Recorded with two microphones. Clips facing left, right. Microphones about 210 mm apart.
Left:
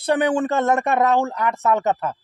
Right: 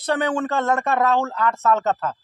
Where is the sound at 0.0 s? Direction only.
15° left (ahead or behind).